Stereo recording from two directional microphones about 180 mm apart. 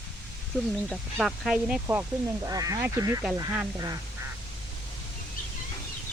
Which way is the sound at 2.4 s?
20° right (ahead or behind).